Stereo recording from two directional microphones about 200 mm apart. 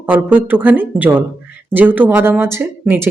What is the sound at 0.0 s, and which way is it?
Speech, 10° right (ahead or behind).